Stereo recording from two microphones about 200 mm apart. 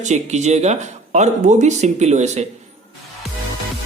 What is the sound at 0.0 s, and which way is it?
Speech, 35° right (ahead or behind).